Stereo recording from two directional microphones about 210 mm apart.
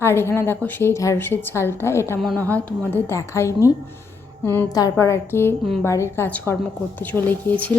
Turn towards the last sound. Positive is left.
turn(degrees=10)  # may be behind; listen again after turning